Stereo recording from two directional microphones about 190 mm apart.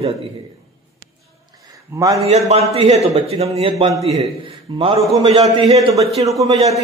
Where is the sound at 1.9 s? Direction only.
15° right (ahead or behind).